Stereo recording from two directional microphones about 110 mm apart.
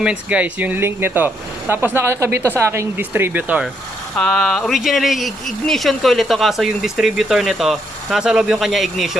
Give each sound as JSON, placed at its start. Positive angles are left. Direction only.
{"t": 0.0, "sound": "speech", "side_deg": -10}
{"t": 4.2, "sound": "speech", "side_deg": 5}